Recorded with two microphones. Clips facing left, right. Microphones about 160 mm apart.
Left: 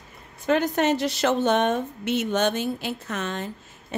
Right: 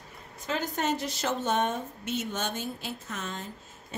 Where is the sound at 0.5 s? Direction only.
70° left (ahead or behind).